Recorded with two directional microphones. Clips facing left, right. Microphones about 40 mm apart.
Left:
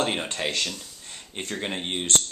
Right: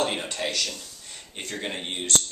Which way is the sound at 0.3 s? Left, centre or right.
Left.